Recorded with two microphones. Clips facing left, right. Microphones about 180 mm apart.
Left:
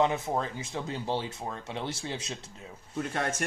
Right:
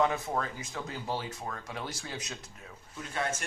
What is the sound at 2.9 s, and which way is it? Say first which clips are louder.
Speech: left 4 dB; 65° left (ahead or behind).